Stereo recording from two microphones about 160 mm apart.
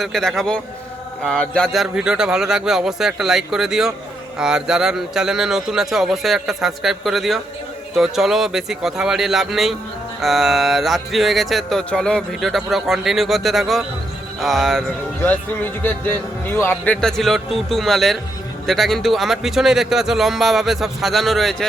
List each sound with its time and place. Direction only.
0.0 s speech: centre (ahead or behind)
15.3 s speech: 10° left (ahead or behind)